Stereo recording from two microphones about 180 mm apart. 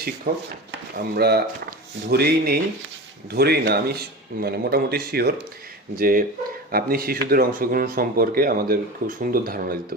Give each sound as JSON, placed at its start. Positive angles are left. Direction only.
{"t": 0.3, "sound": "speech", "side_deg": -50}